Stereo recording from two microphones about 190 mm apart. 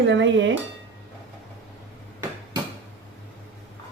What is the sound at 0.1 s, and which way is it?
Speech, 70° right (ahead or behind).